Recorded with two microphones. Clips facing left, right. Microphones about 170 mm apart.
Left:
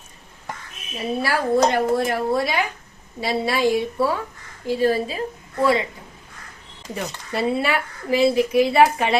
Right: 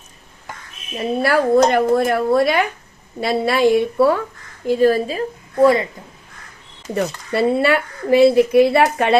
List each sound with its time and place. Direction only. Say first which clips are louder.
0.9 s a woman's voice: right 6 dB; 55° right (ahead or behind)
6.9 s speech: right 7 dB; 55° right (ahead or behind)